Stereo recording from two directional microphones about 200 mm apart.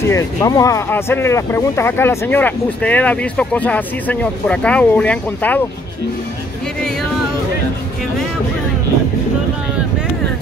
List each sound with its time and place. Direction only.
0.0 s speech: 15° left (ahead or behind)